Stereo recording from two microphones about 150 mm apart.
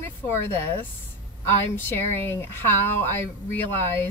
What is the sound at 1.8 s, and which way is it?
A woman's voice, 15° left (ahead or behind).